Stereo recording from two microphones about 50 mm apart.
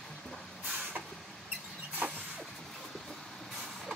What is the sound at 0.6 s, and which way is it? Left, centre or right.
Vehicle, right.